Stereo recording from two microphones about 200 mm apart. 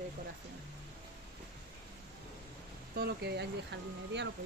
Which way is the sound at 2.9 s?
55° right (ahead or behind).